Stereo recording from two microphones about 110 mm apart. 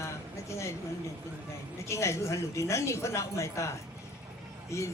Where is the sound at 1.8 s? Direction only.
25° left (ahead or behind).